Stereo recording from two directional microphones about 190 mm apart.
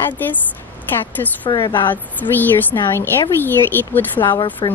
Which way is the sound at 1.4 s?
25° left (ahead or behind).